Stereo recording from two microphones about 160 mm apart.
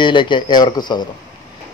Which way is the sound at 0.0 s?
30° left (ahead or behind).